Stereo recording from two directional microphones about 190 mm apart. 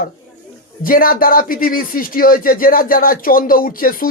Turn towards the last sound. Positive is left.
turn(degrees=50)  # may be behind; listen again after turning